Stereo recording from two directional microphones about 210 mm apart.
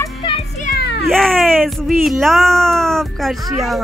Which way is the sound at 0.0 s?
25° left (ahead or behind).